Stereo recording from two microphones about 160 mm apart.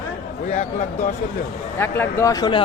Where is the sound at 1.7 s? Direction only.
15° left (ahead or behind).